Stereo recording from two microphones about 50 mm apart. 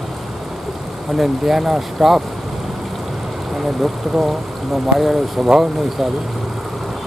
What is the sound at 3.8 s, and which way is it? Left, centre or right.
Speech, centre.